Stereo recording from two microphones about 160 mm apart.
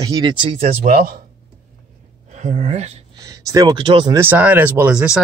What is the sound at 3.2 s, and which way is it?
Speech, 20° right (ahead or behind).